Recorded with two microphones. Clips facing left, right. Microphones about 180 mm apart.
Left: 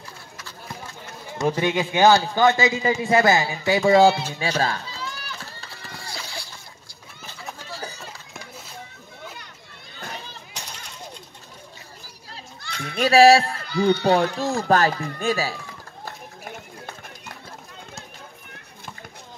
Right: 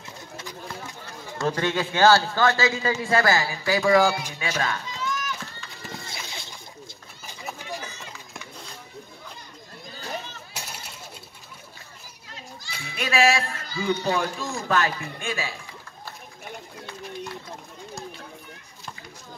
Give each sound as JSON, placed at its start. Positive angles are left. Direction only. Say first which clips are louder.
{"t": 1.4, "sound": "a man's voice", "louder": "left 3 dB", "side_deg": 15}
{"t": 4.4, "sound": "run", "louder": "left 4 dB", "side_deg": 30}
{"t": 5.8, "sound": "run", "louder": "even", "side_deg": -20}
{"t": 7.8, "sound": "run", "louder": "left 4 dB", "side_deg": 35}
{"t": 9.2, "sound": "a sound", "louder": "left 4 dB", "side_deg": 75}
{"t": 10.5, "sound": "a sound", "louder": "right 1 dB", "side_deg": -10}
{"t": 12.7, "sound": "a sound", "louder": "left 8 dB", "side_deg": 60}
{"t": 13.0, "sound": "speech", "louder": "left 8 dB", "side_deg": 35}
{"t": 13.7, "sound": "speech", "louder": "left 7 dB", "side_deg": 65}
{"t": 14.7, "sound": "speech", "louder": "left 4 dB", "side_deg": 40}